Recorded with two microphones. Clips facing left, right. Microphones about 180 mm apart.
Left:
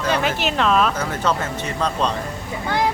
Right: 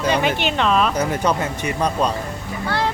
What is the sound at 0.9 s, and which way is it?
Speech, 15° right (ahead or behind).